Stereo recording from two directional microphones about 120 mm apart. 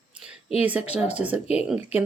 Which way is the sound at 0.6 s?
10° right (ahead or behind).